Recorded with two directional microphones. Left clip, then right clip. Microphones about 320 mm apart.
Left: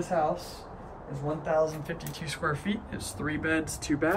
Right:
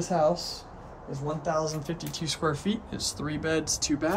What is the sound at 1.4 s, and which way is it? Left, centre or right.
Speech, centre.